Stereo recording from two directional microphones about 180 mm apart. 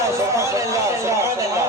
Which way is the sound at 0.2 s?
15° right (ahead or behind).